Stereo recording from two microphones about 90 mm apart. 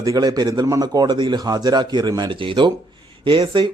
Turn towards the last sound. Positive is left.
turn(degrees=-60)  # may be behind; listen again after turning